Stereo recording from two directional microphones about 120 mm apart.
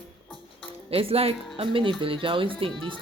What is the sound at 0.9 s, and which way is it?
Speech, 55° right (ahead or behind).